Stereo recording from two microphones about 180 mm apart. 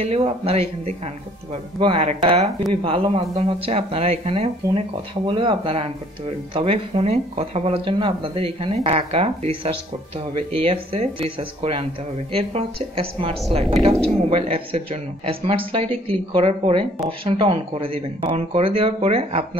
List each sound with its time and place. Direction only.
0.0 s speech: 35° right (ahead or behind)
13.7 s speech: centre (ahead or behind)
14.3 s speech: 30° right (ahead or behind)